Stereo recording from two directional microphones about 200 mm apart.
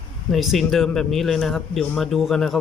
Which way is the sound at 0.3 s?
Centre (ahead or behind).